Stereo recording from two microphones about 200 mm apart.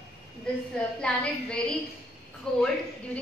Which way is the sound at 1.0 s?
5° left (ahead or behind).